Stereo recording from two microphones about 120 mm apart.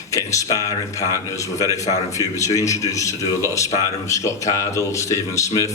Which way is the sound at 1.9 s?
25° left (ahead or behind).